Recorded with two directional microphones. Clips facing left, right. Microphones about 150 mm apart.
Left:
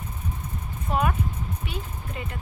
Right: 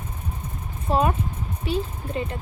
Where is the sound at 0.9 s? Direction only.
30° right (ahead or behind).